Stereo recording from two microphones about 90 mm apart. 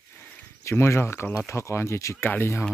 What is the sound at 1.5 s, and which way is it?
Speech, 30° left (ahead or behind).